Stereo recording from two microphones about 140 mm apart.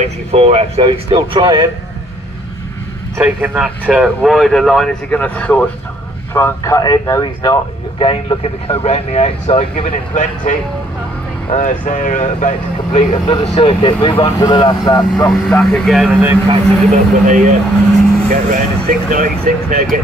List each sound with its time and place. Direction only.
0.3 s speech: 45° right (ahead or behind)
3.2 s speech: 10° right (ahead or behind); by 5.7 s 10° left (ahead or behind)
6.3 s speech: 20° left (ahead or behind)
8.0 s speech: 40° left (ahead or behind)
9.8 s speech: 65° left (ahead or behind)
11.5 s speech: 65° left (ahead or behind)
13.1 s speech: 40° left (ahead or behind)
15.2 s speech: 10° left (ahead or behind)
16.4 s speech: 55° right (ahead or behind)
18.3 s speech: 70° right (ahead or behind)